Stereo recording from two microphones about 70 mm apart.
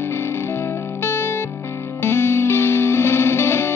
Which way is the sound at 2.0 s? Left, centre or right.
Left.